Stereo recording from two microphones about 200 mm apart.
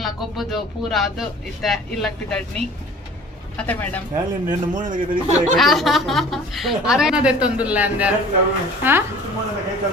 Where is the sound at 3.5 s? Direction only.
10° left (ahead or behind).